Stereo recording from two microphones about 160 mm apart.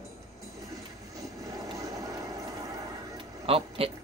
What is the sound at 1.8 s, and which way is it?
Vehicle, 20° right (ahead or behind).